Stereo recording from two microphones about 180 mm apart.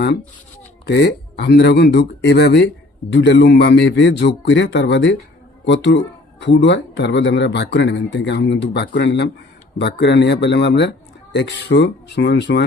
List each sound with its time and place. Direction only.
0.9 s a man's voice: 70° left (ahead or behind)